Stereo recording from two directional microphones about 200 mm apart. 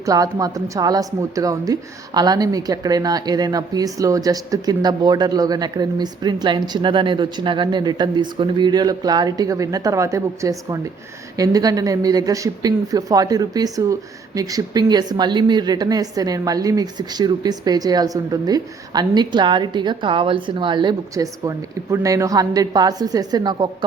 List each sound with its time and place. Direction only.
0.0 s speech: 15° right (ahead or behind)